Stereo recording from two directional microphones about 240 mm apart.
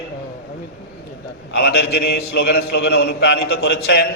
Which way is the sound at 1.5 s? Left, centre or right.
Left.